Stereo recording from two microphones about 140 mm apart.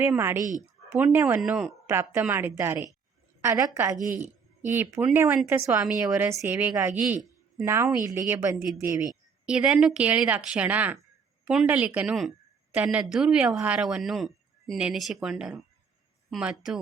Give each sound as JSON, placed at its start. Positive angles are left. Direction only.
{"t": 0.0, "sound": "a woman's voice", "side_deg": -15}
{"t": 1.9, "sound": "a woman's voice", "side_deg": -15}
{"t": 5.8, "sound": "a woman's voice", "side_deg": -5}
{"t": 9.5, "sound": "a woman's voice", "side_deg": -5}